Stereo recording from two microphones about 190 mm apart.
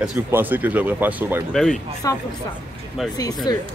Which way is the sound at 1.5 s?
Centre (ahead or behind).